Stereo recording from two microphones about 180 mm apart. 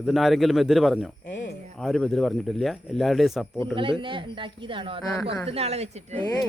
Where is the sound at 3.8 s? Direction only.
30° right (ahead or behind).